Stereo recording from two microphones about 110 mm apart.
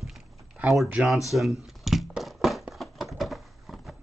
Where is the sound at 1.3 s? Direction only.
Centre (ahead or behind).